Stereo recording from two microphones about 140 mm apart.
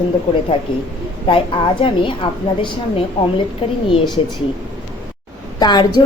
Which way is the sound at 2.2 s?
40° left (ahead or behind).